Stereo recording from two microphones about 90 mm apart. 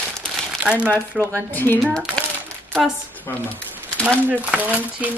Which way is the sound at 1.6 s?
20° left (ahead or behind).